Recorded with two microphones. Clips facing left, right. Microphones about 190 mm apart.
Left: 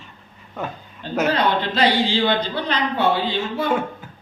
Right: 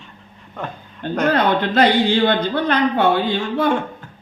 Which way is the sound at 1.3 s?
50° right (ahead or behind).